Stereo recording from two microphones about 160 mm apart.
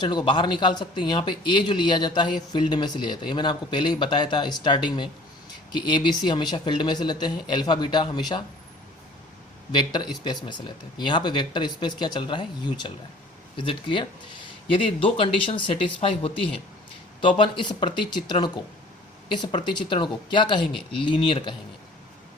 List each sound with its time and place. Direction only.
0.0 s a man's voice: 25° left (ahead or behind)
9.7 s a man's voice: 30° left (ahead or behind)